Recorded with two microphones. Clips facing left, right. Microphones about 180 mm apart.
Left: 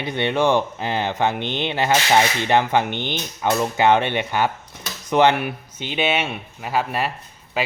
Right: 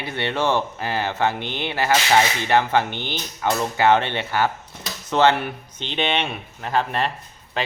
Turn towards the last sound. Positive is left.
turn(degrees=5)  # may be behind; listen again after turning